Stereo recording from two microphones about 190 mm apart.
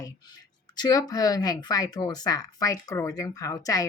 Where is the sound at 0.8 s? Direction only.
20° left (ahead or behind).